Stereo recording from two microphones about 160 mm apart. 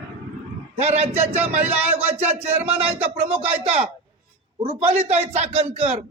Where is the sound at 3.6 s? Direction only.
40° right (ahead or behind).